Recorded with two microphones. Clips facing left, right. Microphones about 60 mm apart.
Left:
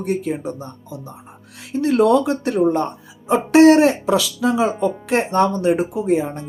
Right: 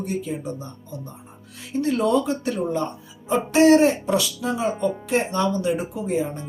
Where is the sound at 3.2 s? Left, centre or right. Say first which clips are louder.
Left 5 dB; left.